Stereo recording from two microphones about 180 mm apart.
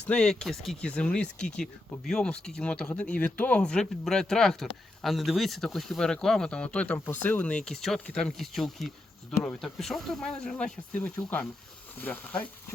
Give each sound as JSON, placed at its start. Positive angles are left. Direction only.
{"t": 0.0, "sound": "speech", "side_deg": 5}